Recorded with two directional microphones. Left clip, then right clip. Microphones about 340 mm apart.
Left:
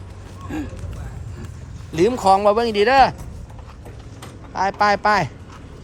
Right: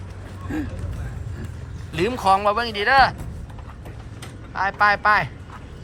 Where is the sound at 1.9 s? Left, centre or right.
Centre.